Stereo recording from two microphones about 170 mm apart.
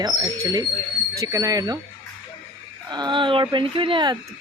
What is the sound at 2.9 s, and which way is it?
Speech, 25° right (ahead or behind).